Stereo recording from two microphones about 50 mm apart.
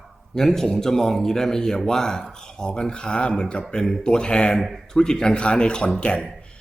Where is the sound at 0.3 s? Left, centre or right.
Centre.